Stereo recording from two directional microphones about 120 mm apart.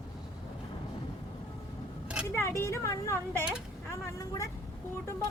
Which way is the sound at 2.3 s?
20° left (ahead or behind).